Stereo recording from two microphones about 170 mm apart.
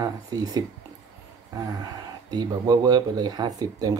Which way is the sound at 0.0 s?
20° right (ahead or behind).